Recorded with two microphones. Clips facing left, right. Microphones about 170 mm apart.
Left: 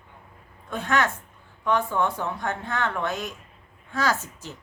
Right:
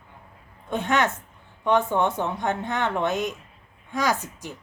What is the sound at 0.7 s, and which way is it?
Speech, 20° right (ahead or behind).